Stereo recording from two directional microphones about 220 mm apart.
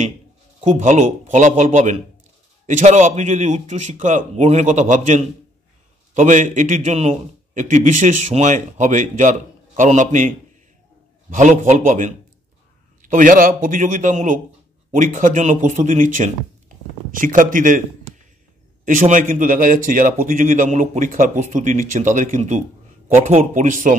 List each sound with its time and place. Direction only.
0.6 s a man's voice: 30° right (ahead or behind)
18.9 s a man's voice: 35° right (ahead or behind)